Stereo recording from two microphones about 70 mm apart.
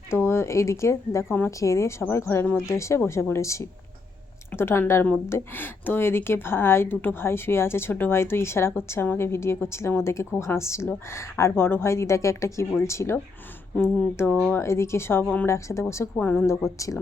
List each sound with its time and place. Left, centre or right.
0.1 s a woman's voice: left
4.5 s a woman's voice: left
14.2 s a woman's voice: left
16.2 s a woman's voice: left
16.5 s speech: left